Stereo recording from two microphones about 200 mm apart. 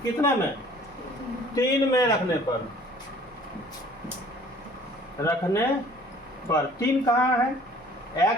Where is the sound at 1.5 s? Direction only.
15° left (ahead or behind).